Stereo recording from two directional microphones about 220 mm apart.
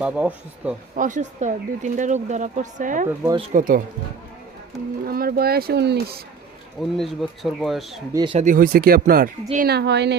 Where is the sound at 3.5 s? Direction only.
40° right (ahead or behind).